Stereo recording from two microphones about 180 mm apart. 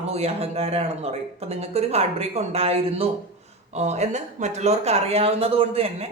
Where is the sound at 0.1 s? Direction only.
35° right (ahead or behind).